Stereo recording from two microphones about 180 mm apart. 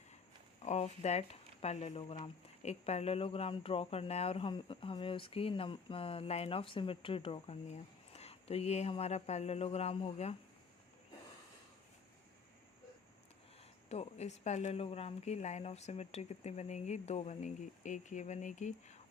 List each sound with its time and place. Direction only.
0.6 s speech: 40° left (ahead or behind)
13.9 s speech: 35° left (ahead or behind)